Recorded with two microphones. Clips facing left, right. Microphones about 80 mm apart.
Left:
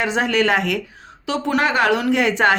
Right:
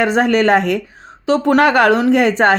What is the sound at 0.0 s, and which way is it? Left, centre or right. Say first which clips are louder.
Speech: right 5 dB; right.